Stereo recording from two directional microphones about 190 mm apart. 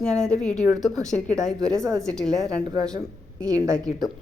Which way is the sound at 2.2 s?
5° left (ahead or behind).